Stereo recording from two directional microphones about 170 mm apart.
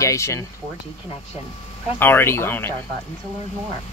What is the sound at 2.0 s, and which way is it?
Speech, 15° left (ahead or behind).